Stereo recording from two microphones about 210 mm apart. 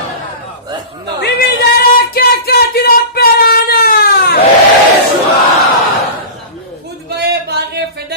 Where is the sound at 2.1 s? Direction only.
50° left (ahead or behind).